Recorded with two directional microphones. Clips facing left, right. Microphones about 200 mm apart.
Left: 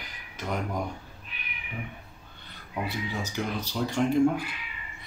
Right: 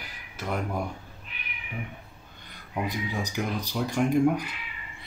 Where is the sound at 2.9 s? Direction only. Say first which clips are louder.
Right 2 dB; 15° right (ahead or behind).